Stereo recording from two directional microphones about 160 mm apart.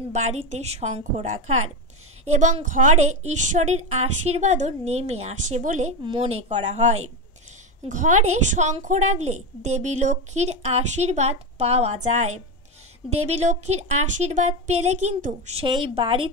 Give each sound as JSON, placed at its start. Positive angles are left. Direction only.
{"t": 0.1, "sound": "a woman's voice", "side_deg": -45}
{"t": 15.6, "sound": "a woman's voice", "side_deg": -30}